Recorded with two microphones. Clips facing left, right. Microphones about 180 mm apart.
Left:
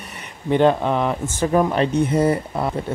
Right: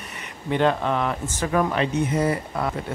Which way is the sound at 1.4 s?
30° left (ahead or behind).